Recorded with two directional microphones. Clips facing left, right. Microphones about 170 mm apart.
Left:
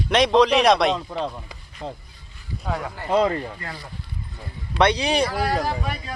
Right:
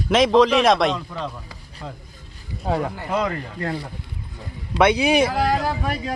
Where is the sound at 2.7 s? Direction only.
30° right (ahead or behind).